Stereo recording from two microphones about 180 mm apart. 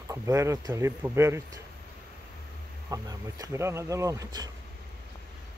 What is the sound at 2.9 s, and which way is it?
Speech, 20° right (ahead or behind).